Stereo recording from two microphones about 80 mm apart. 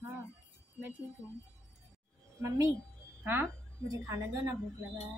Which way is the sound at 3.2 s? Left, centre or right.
Right.